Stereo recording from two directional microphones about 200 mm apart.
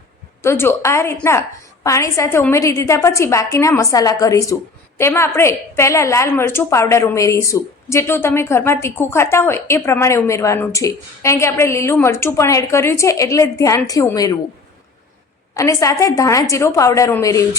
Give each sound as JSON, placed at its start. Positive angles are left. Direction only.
{"t": 0.4, "sound": "a woman's voice", "side_deg": 10}
{"t": 15.5, "sound": "a woman's voice", "side_deg": 15}